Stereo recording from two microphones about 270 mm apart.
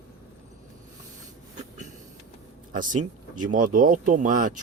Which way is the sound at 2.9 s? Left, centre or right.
Right.